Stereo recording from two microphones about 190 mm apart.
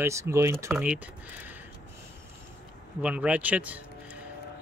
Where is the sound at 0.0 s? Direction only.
15° right (ahead or behind).